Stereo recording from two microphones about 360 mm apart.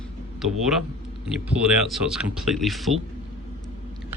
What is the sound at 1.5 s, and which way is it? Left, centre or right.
Speech, centre.